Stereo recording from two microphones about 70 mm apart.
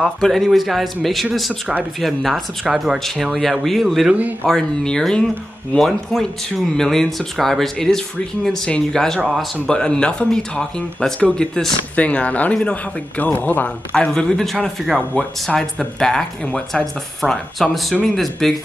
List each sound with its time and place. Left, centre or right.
0.0 s speech: centre
4.5 s speech: centre
9.2 s speech: centre
9.7 s speech: centre
13.9 s speech: centre